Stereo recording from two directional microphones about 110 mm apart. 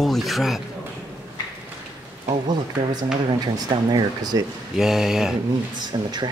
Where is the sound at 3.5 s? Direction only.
40° right (ahead or behind).